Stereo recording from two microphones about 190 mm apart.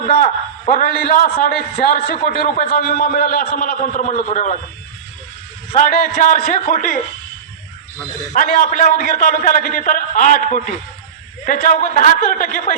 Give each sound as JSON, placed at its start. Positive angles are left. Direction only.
{"t": 0.7, "sound": "a man's voice", "side_deg": 50}
{"t": 5.7, "sound": "a man's voice", "side_deg": 45}
{"t": 8.3, "sound": "a man's voice", "side_deg": 45}